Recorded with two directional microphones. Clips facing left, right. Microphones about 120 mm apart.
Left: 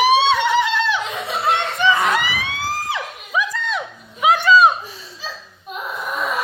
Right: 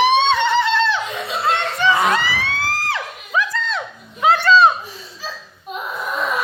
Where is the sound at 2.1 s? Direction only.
15° left (ahead or behind).